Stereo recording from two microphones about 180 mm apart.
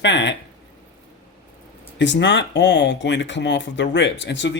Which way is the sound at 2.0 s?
80° left.